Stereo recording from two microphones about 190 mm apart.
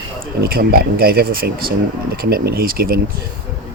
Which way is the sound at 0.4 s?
55° right (ahead or behind).